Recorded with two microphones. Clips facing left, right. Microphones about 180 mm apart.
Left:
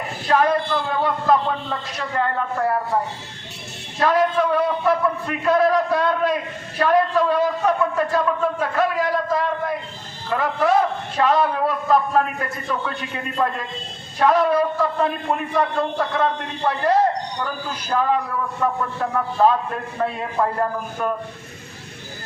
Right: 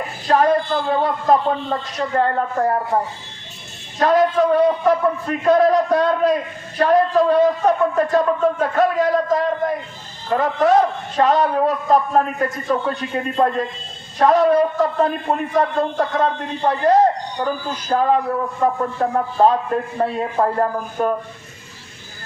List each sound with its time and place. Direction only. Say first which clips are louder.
0.3 s a sound: right 2 dB; 40° right (ahead or behind)
1.0 s a man's voice: right 1 dB; 35° right (ahead or behind)
4.0 s a man's voice: right 3 dB; 40° right (ahead or behind)